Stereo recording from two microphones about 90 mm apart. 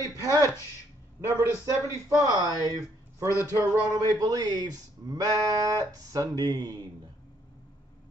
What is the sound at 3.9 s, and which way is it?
Speech, 45° right (ahead or behind).